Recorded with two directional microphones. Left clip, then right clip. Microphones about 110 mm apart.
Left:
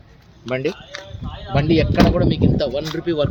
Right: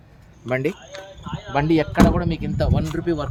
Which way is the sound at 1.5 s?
55° right (ahead or behind).